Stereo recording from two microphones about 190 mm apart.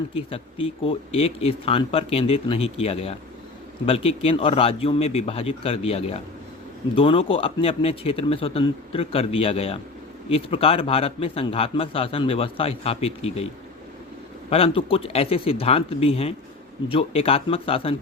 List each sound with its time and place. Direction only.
0.1 s a man's voice: 30° left (ahead or behind)
14.5 s a man's voice: 30° left (ahead or behind)